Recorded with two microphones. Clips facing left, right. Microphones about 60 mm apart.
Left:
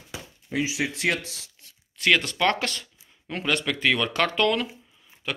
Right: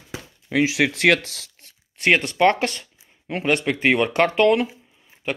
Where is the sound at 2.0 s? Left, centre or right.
Right.